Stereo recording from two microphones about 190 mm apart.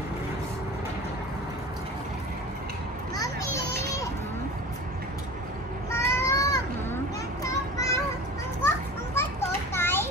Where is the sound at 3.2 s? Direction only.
15° left (ahead or behind).